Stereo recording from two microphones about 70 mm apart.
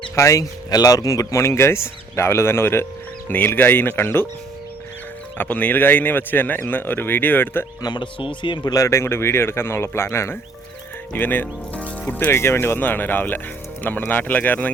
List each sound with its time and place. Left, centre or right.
0.2 s speech: left
0.7 s speech: left
5.4 s speech: left
7.8 s speech: left
8.6 s speech: left
8.9 s speech: left
11.1 s speech: left
12.3 s speech: left